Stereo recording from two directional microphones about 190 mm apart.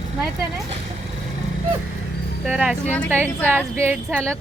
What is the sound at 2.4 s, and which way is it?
A woman's voice, 5° right (ahead or behind).